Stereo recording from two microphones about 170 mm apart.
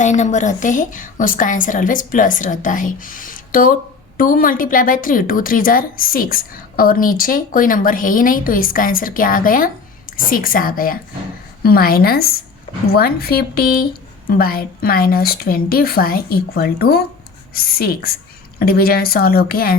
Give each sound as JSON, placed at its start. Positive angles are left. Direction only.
{"t": 0.0, "sound": "a woman's voice", "side_deg": 45}